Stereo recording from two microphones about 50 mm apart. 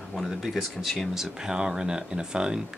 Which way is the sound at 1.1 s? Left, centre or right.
Centre.